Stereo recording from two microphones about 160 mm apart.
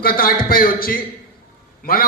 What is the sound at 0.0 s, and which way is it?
A man's voice, 65° left (ahead or behind).